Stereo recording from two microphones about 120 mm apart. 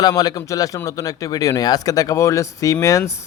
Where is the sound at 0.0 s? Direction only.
30° left (ahead or behind).